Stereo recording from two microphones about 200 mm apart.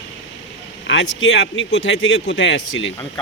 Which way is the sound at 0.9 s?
65° left (ahead or behind).